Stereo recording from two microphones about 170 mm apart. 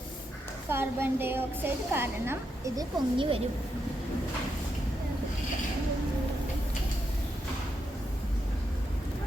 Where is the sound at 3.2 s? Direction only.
35° right (ahead or behind).